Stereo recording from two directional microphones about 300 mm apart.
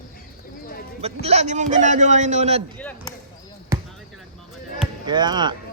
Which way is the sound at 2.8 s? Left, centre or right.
Centre.